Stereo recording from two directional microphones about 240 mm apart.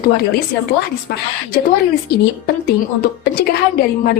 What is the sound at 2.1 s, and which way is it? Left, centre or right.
A woman's voice, left.